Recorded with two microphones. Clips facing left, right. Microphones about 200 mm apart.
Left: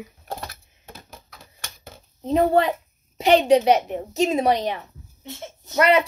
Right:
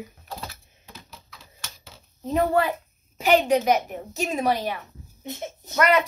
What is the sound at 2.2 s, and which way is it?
A woman's voice, 30° left (ahead or behind).